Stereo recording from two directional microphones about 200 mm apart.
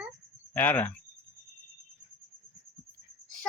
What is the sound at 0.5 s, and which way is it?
Speech, 10° left (ahead or behind).